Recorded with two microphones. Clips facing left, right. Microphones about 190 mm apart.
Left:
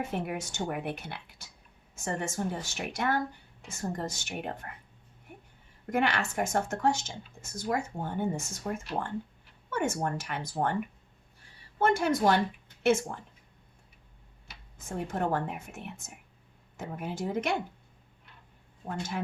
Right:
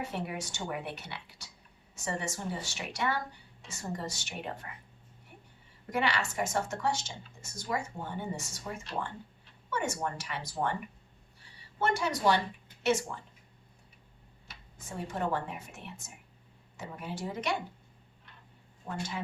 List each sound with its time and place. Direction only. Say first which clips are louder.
0.0 s speech: left 3 dB; 50° left (ahead or behind)
5.9 s speech: left 3 dB; 50° left (ahead or behind)
11.8 s speech: left 4 dB; 50° left (ahead or behind)
14.8 s speech: left 3 dB; 50° left (ahead or behind)
18.9 s speech: left 3 dB; 50° left (ahead or behind)